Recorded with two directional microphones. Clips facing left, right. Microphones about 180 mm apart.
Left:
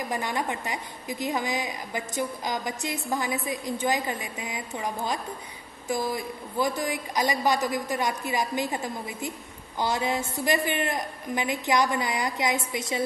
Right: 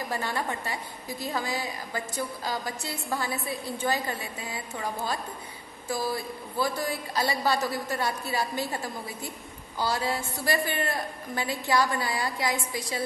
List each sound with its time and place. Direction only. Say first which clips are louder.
0.1 s a woman's voice: left 1 dB; 15° left (ahead or behind)